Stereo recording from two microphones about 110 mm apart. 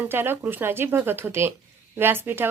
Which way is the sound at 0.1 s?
20° right (ahead or behind).